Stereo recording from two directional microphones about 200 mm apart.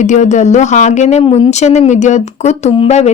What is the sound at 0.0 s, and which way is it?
Speech, 35° left (ahead or behind).